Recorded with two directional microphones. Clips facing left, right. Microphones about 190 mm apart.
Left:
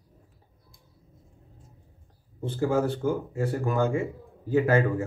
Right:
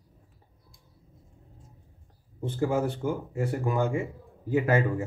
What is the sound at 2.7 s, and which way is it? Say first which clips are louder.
A man's voice: left 4 dB; 15° right (ahead or behind).